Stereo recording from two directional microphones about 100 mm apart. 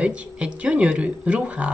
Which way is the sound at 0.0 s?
10° right (ahead or behind).